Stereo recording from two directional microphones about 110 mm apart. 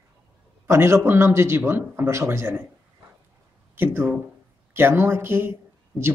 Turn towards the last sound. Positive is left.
turn(degrees=-20)  # may be behind; listen again after turning